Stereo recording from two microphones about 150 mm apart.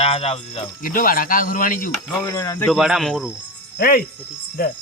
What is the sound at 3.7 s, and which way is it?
Speech, 75° left (ahead or behind).